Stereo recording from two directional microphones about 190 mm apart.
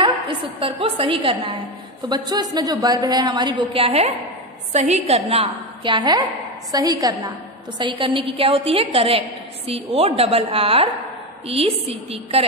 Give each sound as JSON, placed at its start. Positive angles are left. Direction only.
{"t": 0.6, "sound": "a woman's voice", "side_deg": -30}